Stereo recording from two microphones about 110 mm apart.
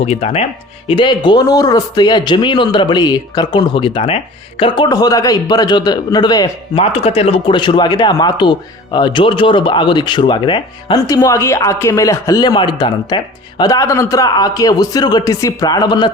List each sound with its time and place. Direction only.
0.0 s speech: 65° left (ahead or behind)
0.9 s speech: 45° left (ahead or behind)
6.7 s speech: 65° left (ahead or behind); by 10.9 s 45° left (ahead or behind)
10.9 s speech: 30° left (ahead or behind)
12.4 s speech: 45° left (ahead or behind)